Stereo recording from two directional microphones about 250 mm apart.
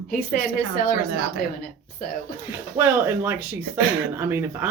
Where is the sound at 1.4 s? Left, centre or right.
Left.